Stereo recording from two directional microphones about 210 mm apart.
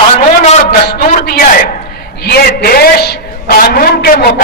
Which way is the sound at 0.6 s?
45° left (ahead or behind).